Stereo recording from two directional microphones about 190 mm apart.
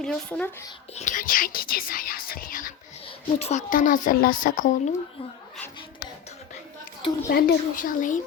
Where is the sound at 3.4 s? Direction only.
35° left (ahead or behind).